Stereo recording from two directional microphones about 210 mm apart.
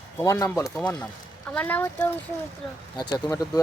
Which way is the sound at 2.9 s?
20° left (ahead or behind).